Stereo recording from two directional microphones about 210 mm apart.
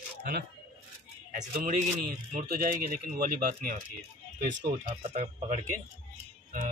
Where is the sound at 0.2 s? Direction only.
45° right (ahead or behind).